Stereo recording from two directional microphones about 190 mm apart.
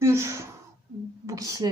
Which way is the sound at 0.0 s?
15° right (ahead or behind).